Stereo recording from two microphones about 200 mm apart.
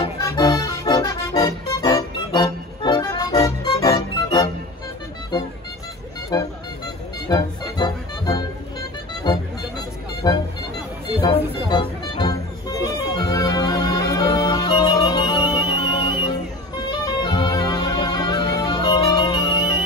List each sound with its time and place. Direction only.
0.0 s music: 20° left (ahead or behind)
6.3 s music: 20° left (ahead or behind)
7.7 s music: 20° left (ahead or behind)